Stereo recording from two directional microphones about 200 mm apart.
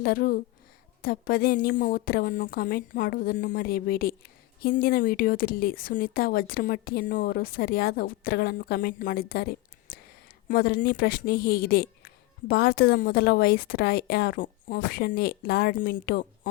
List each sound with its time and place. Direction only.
0.0 s speech: 45° left (ahead or behind)